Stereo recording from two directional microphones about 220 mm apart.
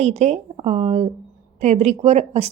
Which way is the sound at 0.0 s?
30° right (ahead or behind).